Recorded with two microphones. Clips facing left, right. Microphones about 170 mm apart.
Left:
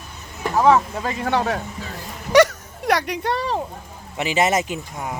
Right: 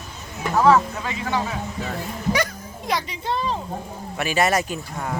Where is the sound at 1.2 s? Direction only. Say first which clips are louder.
Left 4 dB; 65° left (ahead or behind).